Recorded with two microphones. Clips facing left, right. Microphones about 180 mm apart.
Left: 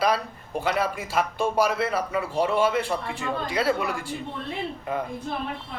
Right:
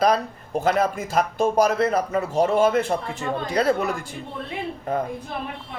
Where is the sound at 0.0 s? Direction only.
45° right (ahead or behind).